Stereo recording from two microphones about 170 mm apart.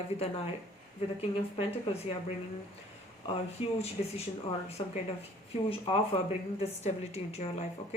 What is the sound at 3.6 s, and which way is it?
Speech, 35° left (ahead or behind).